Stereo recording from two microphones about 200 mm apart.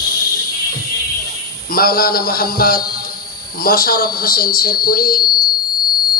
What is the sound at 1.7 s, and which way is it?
A man's voice, 45° left (ahead or behind).